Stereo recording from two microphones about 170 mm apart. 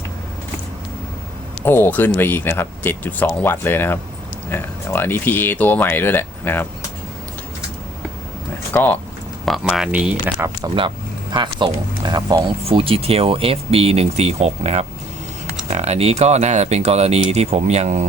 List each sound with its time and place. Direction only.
1.6 s speech: 15° left (ahead or behind)
8.7 s speech: 10° left (ahead or behind)
9.5 s speech: centre (ahead or behind)
10.8 s speech: 30° right (ahead or behind)